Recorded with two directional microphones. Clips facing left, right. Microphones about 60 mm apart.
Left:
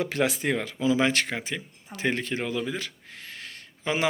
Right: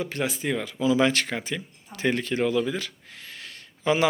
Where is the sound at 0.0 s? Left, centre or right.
Left.